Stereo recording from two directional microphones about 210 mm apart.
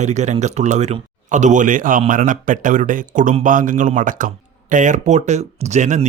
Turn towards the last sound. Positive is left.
turn(degrees=-35)  # may be behind; listen again after turning